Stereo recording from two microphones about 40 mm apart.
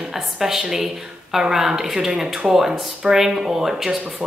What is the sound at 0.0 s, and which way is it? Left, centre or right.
A woman's voice, centre.